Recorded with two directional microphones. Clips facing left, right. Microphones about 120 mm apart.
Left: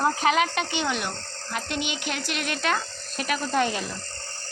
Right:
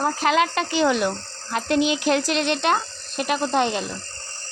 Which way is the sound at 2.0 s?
35° right (ahead or behind).